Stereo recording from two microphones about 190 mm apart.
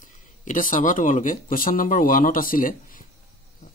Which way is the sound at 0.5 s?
45° left (ahead or behind).